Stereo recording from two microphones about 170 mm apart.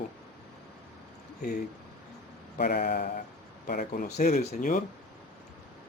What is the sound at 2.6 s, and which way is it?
Speech, 65° left (ahead or behind).